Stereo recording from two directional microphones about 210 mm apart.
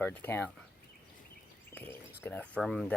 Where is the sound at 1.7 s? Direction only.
10° left (ahead or behind).